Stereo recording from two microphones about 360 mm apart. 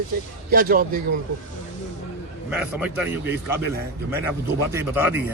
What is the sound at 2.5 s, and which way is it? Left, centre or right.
A man's voice, centre.